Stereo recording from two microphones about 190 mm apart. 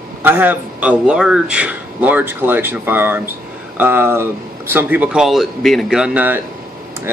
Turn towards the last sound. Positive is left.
turn(degrees=-10)  # may be behind; listen again after turning